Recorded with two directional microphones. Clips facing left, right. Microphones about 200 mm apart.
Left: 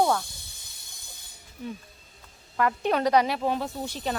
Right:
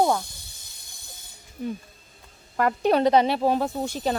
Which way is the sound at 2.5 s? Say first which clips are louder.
Right 4 dB; 40° right (ahead or behind).